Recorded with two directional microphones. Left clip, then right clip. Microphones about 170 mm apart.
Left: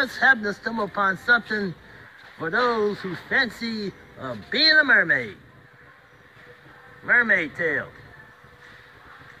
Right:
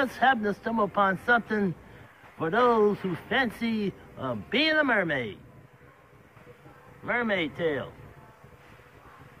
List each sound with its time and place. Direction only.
0.0 s speech: 10° right (ahead or behind)
0.3 s speech: centre (ahead or behind)
3.5 s speech: 30° right (ahead or behind)
4.2 s speech: 10° right (ahead or behind)
7.1 s speech: 10° right (ahead or behind)